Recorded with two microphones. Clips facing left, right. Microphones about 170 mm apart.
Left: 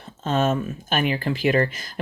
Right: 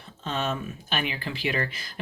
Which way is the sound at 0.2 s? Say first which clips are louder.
Left 8 dB; 45° left (ahead or behind).